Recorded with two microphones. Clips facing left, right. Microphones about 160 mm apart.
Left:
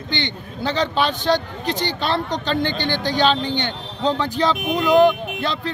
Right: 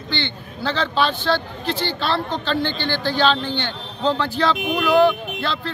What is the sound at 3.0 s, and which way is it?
Speech, 20° left (ahead or behind).